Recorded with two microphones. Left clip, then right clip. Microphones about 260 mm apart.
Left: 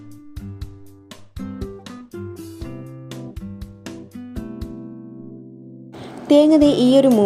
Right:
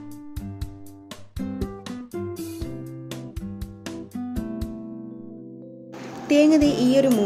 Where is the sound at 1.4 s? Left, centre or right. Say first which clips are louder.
Even; centre.